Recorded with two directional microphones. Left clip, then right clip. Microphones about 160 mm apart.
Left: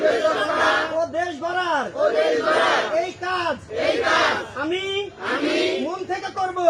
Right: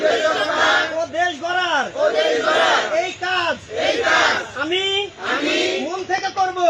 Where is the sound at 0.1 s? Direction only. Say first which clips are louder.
Right 2 dB; 20° left (ahead or behind).